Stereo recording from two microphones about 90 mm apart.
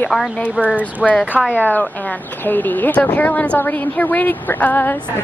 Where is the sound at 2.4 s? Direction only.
20° left (ahead or behind).